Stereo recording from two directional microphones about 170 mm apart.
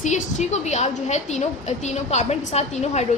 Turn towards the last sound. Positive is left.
turn(degrees=40)  # may be behind; listen again after turning